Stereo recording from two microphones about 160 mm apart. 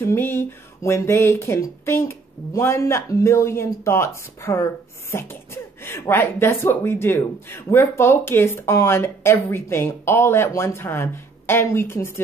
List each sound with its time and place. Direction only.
0.0 s speech: 15° left (ahead or behind)